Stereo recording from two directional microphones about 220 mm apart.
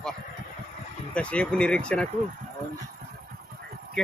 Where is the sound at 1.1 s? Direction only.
5° left (ahead or behind).